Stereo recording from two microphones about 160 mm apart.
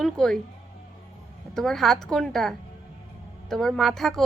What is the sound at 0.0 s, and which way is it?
Speech, 5° left (ahead or behind).